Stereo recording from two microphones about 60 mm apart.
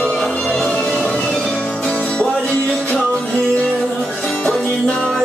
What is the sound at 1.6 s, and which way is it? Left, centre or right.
Music, centre.